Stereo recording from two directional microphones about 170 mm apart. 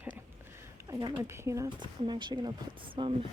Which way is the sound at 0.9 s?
25° right (ahead or behind).